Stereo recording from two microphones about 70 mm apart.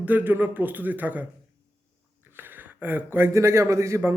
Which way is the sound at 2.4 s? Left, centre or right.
Right.